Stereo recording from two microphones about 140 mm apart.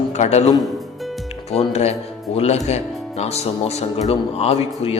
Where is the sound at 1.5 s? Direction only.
50° left (ahead or behind).